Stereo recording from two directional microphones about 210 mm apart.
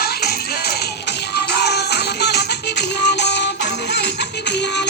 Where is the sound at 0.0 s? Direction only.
50° left (ahead or behind).